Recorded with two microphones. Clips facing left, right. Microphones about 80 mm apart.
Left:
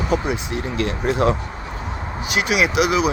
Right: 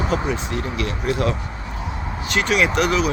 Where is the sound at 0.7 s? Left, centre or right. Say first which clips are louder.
Left 4 dB; left.